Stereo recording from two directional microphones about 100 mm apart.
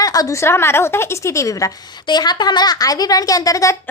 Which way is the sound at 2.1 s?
45° left (ahead or behind).